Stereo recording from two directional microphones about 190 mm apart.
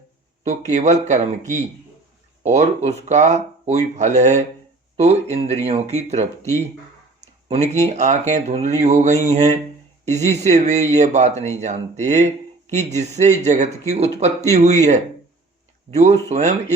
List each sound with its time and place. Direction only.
0.4 s speech: 35° right (ahead or behind)
2.4 s speech: 35° right (ahead or behind)
7.9 s speech: 35° right (ahead or behind)